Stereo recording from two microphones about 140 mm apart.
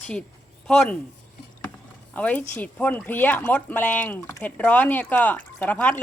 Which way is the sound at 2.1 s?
10° left (ahead or behind).